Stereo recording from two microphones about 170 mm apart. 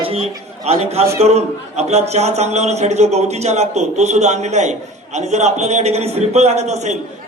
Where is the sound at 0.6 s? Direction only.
40° right (ahead or behind).